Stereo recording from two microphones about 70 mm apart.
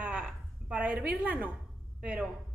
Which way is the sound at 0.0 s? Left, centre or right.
Centre.